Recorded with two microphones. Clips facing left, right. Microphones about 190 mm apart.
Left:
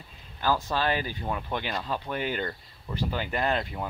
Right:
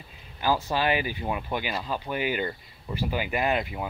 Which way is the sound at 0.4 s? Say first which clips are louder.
Right 1 dB; 10° right (ahead or behind).